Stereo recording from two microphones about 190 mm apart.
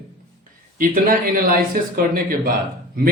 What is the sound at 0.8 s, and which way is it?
Speech, 45° right (ahead or behind).